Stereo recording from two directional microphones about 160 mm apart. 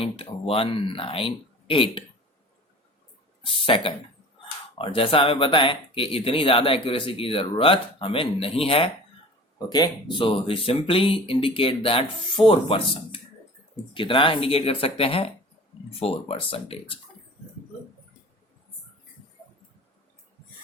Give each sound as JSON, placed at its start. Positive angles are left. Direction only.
{"t": 0.0, "sound": "speech", "side_deg": 35}
{"t": 3.4, "sound": "speech", "side_deg": 35}